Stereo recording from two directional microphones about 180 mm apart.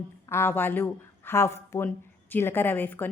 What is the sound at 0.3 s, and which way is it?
A woman's voice, 15° left (ahead or behind).